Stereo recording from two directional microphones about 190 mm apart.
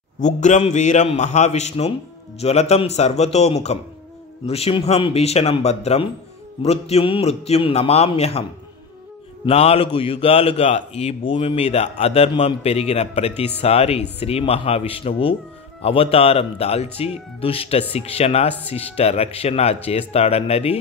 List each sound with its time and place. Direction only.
0.2 s speech: 40° left (ahead or behind)
9.5 s speech: 30° left (ahead or behind)